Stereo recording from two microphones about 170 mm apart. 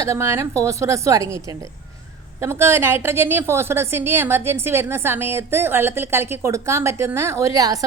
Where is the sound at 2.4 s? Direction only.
15° right (ahead or behind).